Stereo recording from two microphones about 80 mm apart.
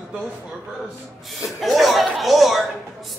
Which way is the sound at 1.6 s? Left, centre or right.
Centre.